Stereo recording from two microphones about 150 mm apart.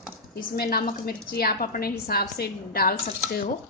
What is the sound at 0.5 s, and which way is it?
A woman's voice, 90° left.